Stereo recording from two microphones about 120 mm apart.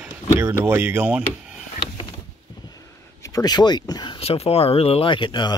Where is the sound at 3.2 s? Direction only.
30° left (ahead or behind).